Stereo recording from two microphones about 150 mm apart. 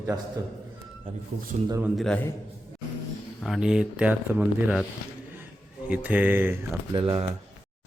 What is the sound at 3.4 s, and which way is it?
Speech, centre (ahead or behind).